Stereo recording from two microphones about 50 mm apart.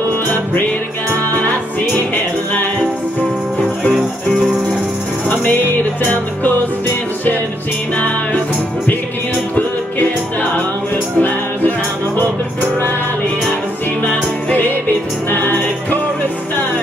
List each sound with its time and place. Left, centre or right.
5.3 s music: left
11.1 s music: left
14.0 s music: left